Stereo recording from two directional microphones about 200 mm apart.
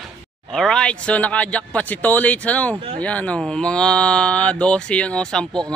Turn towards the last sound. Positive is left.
turn(degrees=5)  # may be behind; listen again after turning